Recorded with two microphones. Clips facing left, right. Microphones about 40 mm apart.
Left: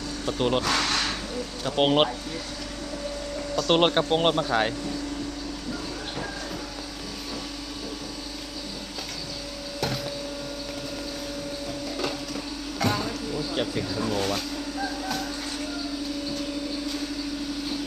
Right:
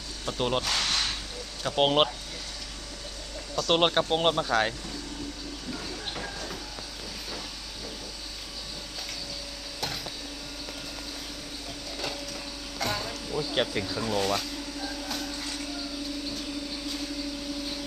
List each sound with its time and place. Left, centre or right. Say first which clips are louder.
0.3 s speech: left 3 dB; centre
0.6 s speech: left 4 dB; left
1.6 s speech: left 2 dB; centre
3.5 s a man's voice: left 2 dB; centre
13.6 s speech: right 1 dB; right
14.0 s a man's voice: left 1 dB; centre